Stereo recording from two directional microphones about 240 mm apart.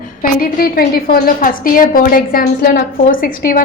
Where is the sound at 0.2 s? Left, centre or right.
Left.